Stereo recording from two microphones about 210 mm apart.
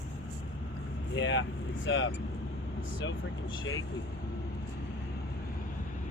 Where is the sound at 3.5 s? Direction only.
65° left (ahead or behind).